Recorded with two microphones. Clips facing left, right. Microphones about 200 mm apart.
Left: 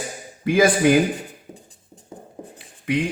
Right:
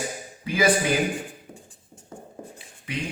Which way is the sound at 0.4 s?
50° left (ahead or behind).